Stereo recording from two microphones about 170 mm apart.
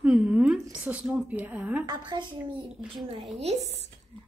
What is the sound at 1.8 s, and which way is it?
Speech, 25° right (ahead or behind).